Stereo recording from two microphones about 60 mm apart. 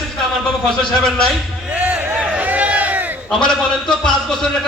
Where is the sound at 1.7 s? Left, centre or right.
Right.